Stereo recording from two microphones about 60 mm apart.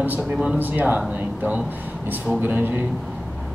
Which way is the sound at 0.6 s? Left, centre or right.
Right.